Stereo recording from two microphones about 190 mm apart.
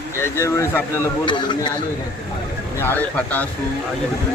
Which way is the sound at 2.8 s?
10° left (ahead or behind).